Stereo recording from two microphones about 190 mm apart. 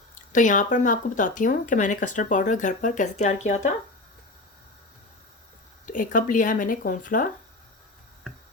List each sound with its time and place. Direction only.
0.3 s speech: 40° left (ahead or behind)
5.8 s speech: 45° left (ahead or behind)